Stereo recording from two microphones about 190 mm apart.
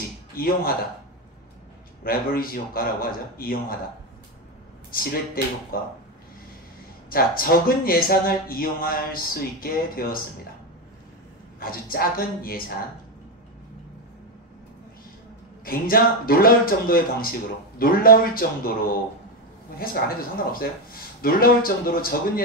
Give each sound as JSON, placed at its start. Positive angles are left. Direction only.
{"t": 0.4, "sound": "a man's voice", "side_deg": 50}
{"t": 2.0, "sound": "a man's voice", "side_deg": 50}
{"t": 4.9, "sound": "a man's voice", "side_deg": 50}
{"t": 7.1, "sound": "a man's voice", "side_deg": 50}
{"t": 11.6, "sound": "a man's voice", "side_deg": 50}
{"t": 15.6, "sound": "a man's voice", "side_deg": 50}
{"t": 19.8, "sound": "a man's voice", "side_deg": 50}